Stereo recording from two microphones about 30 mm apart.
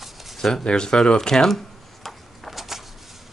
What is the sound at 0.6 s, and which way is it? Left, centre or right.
Speech, left.